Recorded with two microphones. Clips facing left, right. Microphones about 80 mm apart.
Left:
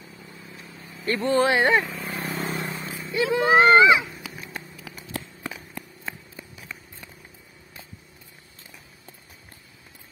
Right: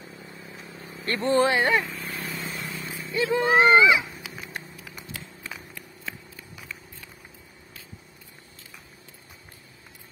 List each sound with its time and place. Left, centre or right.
0.9 s speech: right
1.5 s speech: left
2.0 s vehicle: left
2.3 s vehicle: left
2.7 s vehicle: left
3.3 s speech: centre
4.8 s a sound: left
5.8 s a sound: left